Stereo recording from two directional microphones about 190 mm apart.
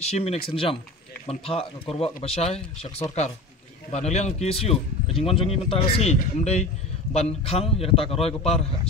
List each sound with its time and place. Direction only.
0.0 s speech: 35° left (ahead or behind)